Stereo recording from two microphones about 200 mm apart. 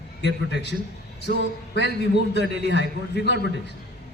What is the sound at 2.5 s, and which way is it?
Speech, 55° left (ahead or behind).